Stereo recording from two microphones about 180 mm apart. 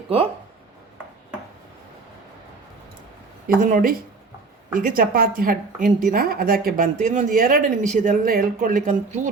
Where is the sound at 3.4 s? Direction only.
50° right (ahead or behind).